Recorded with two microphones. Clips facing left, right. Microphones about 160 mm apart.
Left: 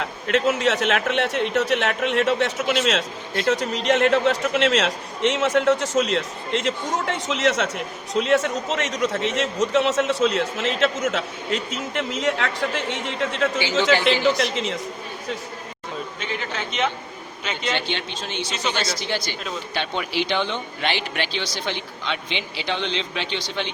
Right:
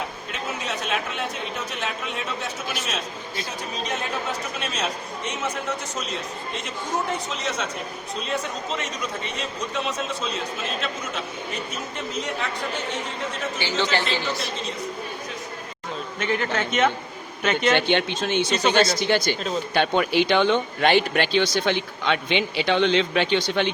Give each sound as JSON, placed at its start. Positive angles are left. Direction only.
{"t": 0.0, "sound": "a man's voice", "side_deg": 90}
{"t": 16.2, "sound": "a man's voice", "side_deg": -55}